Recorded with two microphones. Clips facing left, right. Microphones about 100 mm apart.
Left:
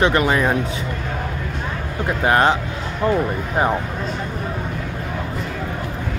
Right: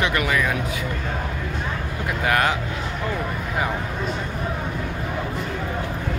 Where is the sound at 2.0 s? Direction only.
30° left (ahead or behind).